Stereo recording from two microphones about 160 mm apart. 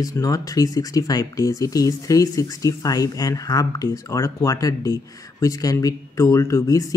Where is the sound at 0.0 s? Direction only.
20° left (ahead or behind).